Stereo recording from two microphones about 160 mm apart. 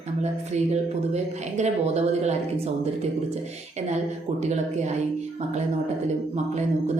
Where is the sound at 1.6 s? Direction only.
45° right (ahead or behind).